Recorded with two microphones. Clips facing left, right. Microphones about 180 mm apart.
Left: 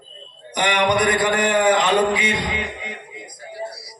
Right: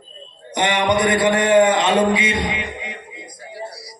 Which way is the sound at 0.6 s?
25° right (ahead or behind).